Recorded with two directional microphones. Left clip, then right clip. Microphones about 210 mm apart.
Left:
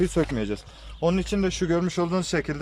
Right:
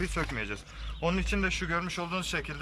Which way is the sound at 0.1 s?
30° left (ahead or behind).